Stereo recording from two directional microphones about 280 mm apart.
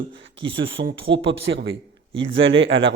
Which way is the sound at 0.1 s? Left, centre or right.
Right.